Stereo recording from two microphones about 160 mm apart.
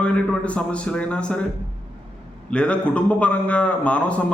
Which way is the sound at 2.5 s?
5° left (ahead or behind).